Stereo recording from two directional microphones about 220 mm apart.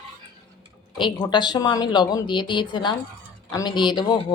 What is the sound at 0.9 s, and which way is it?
A woman's voice, 20° left (ahead or behind).